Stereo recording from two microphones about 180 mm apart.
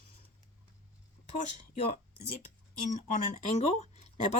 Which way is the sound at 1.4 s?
40° left (ahead or behind).